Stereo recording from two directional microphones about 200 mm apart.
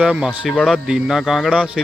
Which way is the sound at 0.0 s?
5° right (ahead or behind).